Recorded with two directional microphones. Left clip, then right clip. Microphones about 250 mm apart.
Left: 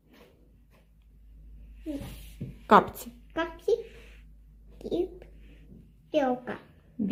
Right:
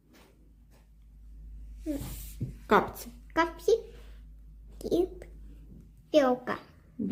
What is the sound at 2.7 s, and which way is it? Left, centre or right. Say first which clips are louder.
Speech: left 5 dB; centre.